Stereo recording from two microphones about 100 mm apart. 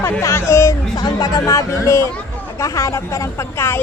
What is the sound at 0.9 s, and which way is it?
A woman's voice, 40° left (ahead or behind).